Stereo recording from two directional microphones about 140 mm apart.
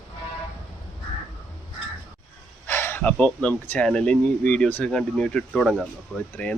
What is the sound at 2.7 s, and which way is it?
Speech, 15° left (ahead or behind).